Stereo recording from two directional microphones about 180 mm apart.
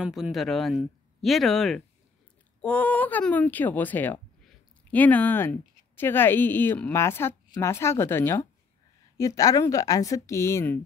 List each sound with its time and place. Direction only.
0.0 s a woman's voice: centre (ahead or behind); by 10.8 s 15° left (ahead or behind)